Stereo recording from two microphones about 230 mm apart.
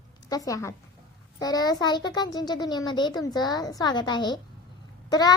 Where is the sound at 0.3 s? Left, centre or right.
Centre.